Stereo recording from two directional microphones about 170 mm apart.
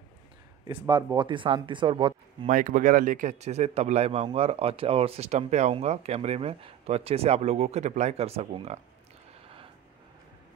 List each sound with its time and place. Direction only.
0.7 s speech: 30° right (ahead or behind)
2.4 s a man's voice: 50° right (ahead or behind)